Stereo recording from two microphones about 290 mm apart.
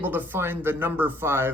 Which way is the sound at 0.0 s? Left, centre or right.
Centre.